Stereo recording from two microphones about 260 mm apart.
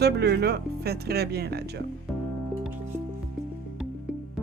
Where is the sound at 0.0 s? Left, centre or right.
Right.